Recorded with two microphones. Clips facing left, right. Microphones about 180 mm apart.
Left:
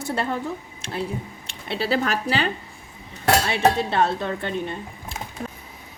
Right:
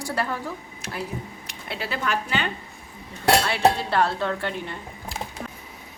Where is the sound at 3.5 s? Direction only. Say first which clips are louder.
Left 1 dB; 20° left (ahead or behind).